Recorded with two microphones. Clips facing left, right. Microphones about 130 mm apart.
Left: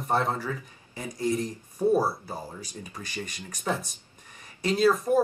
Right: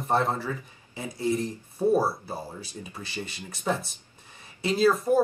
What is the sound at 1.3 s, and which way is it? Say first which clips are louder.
Speech: right 1 dB; centre (ahead or behind).